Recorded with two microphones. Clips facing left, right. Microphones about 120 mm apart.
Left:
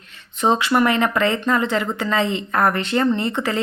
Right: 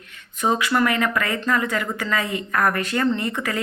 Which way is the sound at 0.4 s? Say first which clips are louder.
Left 3 dB; 25° left (ahead or behind).